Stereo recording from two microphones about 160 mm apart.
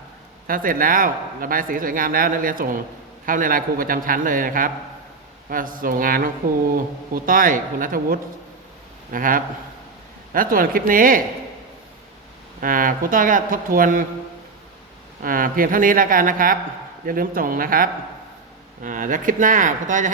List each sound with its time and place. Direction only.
0.4 s a man's voice: 60° right (ahead or behind)
12.5 s a man's voice: 60° right (ahead or behind)
15.2 s a man's voice: 60° right (ahead or behind)